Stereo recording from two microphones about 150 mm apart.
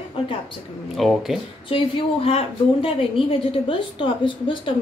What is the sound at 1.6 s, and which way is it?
A woman's voice, 40° left (ahead or behind).